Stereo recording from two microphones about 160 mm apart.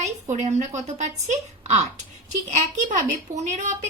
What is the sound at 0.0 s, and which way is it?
A woman's voice, 45° right (ahead or behind).